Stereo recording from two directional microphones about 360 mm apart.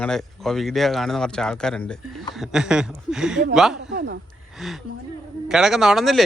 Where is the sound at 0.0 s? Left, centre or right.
Centre.